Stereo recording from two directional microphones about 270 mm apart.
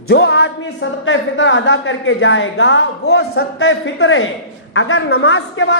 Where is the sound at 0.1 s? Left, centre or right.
Left.